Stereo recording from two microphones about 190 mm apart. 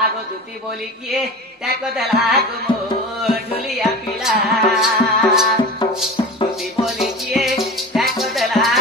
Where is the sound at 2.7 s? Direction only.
25° left (ahead or behind).